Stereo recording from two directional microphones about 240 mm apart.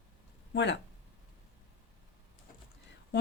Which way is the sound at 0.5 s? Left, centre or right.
Left.